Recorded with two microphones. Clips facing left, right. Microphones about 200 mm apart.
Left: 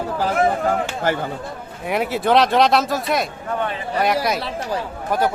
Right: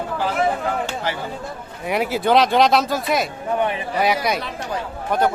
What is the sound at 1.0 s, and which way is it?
Speech, 50° left (ahead or behind).